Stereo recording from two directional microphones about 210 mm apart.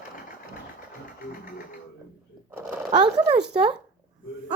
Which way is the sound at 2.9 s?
20° right (ahead or behind).